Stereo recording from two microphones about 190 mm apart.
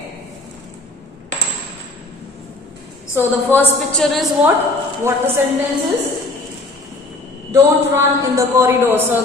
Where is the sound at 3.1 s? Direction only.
10° left (ahead or behind).